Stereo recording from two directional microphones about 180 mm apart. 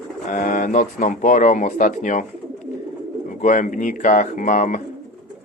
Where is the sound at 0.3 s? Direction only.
45° left (ahead or behind).